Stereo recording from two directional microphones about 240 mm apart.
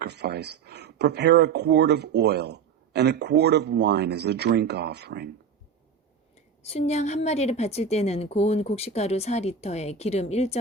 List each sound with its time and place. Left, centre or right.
0.0 s speech: right
6.7 s speech: left